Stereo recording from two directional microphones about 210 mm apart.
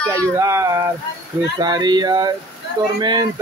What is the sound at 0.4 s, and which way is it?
Speech, 15° right (ahead or behind).